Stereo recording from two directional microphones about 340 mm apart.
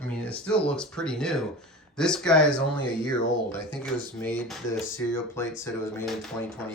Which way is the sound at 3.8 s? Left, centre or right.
Centre.